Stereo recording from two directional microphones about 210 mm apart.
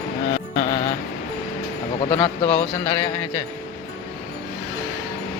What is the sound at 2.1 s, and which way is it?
A man's voice, 20° left (ahead or behind).